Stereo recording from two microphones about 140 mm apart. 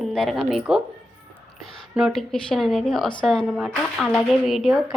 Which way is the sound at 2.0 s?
Centre (ahead or behind).